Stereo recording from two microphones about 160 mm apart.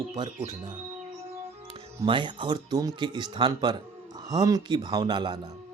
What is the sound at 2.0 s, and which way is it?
Speech, 30° right (ahead or behind).